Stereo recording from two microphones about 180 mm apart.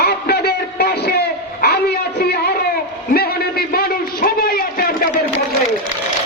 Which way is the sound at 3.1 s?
60° left (ahead or behind).